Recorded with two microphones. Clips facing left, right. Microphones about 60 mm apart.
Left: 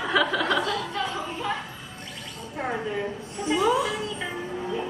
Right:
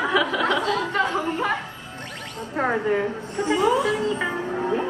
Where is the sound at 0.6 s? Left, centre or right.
Right.